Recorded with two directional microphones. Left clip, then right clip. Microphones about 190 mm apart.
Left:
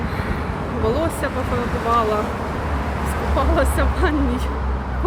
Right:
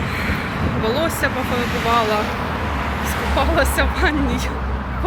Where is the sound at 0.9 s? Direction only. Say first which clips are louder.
Right 2 dB; 15° left (ahead or behind).